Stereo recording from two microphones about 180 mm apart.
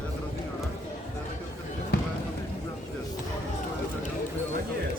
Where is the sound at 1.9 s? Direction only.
65° left (ahead or behind).